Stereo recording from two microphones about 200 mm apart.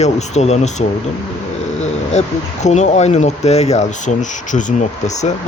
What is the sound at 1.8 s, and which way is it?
Speech, 35° left (ahead or behind).